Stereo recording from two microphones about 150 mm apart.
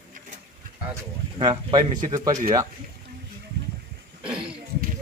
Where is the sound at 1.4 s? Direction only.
30° right (ahead or behind).